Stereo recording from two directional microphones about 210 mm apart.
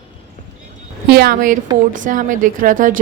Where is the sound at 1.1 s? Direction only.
45° right (ahead or behind).